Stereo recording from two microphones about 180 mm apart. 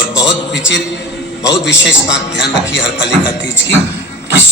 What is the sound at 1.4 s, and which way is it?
A man's voice, 80° left.